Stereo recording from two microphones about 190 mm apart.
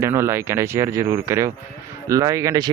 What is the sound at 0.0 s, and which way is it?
Speech, 15° right (ahead or behind).